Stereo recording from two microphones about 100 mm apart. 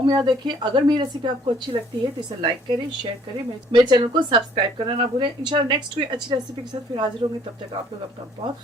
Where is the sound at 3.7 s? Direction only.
50° right (ahead or behind).